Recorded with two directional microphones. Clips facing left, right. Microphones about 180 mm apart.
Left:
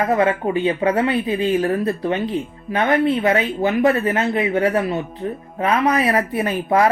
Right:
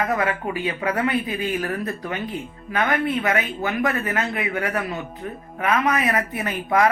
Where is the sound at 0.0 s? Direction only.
30° left (ahead or behind).